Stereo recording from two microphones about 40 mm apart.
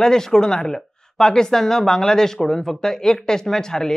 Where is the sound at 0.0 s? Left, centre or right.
Centre.